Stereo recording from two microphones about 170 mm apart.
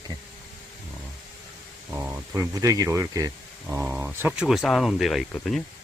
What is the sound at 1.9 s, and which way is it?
Speech, 15° right (ahead or behind).